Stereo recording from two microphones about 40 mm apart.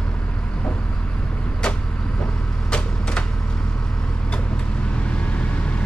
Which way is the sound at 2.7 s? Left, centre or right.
Left.